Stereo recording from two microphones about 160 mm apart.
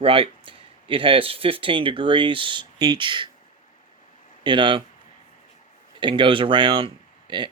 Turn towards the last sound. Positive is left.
turn(degrees=-30)  # may be behind; listen again after turning